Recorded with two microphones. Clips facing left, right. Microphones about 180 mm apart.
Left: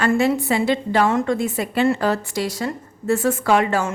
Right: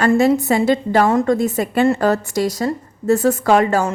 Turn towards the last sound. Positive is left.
turn(degrees=-40)  # may be behind; listen again after turning